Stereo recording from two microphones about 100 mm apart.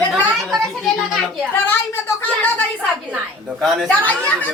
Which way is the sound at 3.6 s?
Centre (ahead or behind).